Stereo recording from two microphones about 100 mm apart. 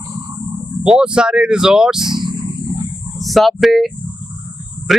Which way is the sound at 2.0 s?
50° right (ahead or behind).